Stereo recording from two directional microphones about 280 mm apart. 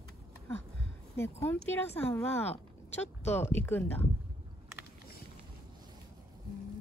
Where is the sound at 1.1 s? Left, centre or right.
Centre.